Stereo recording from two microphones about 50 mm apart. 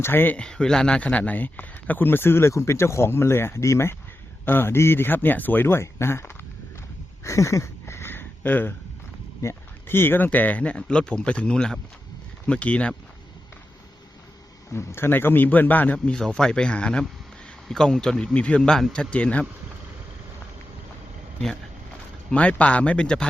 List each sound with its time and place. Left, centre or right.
0.0 s speech: left
0.3 s speech: centre; by 2.5 s left
2.5 s speech: left
4.4 s speech: left
5.6 s speech: left
7.3 s a sound: left
8.1 s a sound: left
9.4 s speech: left
9.8 s speech: left
10.2 s speech: left
14.7 s a man's voice: left
16.1 s speech: centre
22.3 s speech: left